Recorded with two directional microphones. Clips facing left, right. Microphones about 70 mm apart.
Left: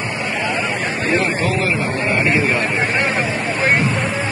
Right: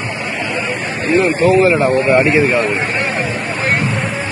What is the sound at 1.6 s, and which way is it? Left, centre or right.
Speech, right.